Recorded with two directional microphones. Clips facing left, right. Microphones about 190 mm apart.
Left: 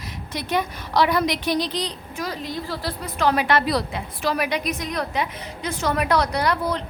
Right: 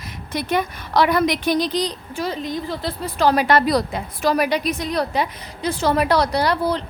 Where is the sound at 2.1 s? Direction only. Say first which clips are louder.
Right 4 dB; 25° right (ahead or behind).